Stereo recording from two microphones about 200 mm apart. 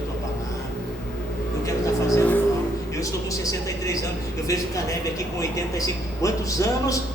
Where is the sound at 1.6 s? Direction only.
15° left (ahead or behind).